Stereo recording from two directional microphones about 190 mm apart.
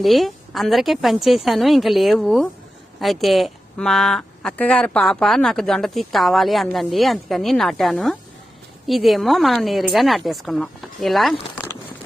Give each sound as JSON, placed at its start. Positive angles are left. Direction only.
{"t": 0.0, "sound": "speech", "side_deg": 0}